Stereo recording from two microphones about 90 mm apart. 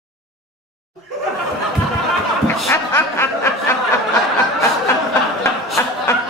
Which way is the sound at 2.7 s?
25° left (ahead or behind).